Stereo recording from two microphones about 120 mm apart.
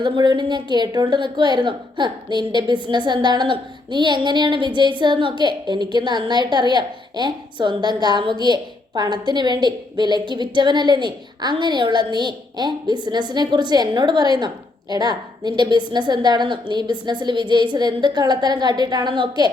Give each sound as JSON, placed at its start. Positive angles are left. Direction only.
{"t": 0.0, "sound": "a woman's voice", "side_deg": -40}